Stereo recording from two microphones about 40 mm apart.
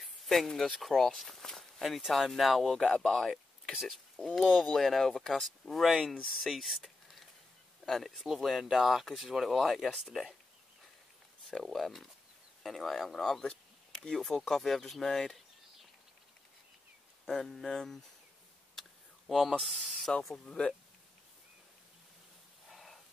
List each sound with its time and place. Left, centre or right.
0.0 s speech: centre
3.7 s speech: centre
4.2 s speech: centre
6.4 s a sound: centre
7.8 s speech: centre
11.6 s speech: centre
17.3 s speech: centre
18.8 s a sound: centre
19.6 s speech: centre
20.4 s speech: left
22.7 s a sound: centre